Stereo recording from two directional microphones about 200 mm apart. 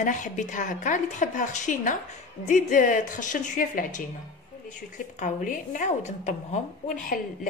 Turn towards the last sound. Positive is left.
turn(degrees=40)  # may be behind; listen again after turning